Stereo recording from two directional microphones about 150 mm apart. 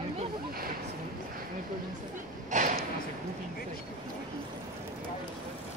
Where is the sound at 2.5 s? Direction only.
60° right (ahead or behind).